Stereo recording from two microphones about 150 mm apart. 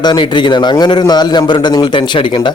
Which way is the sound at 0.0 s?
30° left (ahead or behind).